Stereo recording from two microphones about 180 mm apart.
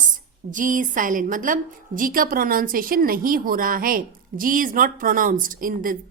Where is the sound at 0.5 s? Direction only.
45° right (ahead or behind).